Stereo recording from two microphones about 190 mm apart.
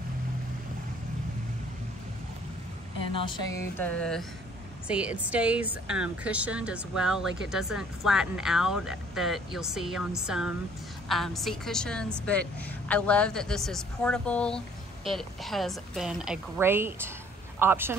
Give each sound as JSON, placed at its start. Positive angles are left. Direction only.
{"t": 3.1, "sound": "speech", "side_deg": 25}
{"t": 3.5, "sound": "a sound", "side_deg": 10}
{"t": 4.8, "sound": "a woman's voice", "side_deg": -5}